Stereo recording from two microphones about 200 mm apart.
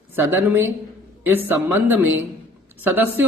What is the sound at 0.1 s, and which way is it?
A man's voice, 10° right (ahead or behind).